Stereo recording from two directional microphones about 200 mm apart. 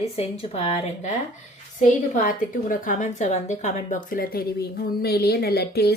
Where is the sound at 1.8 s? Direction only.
40° left (ahead or behind).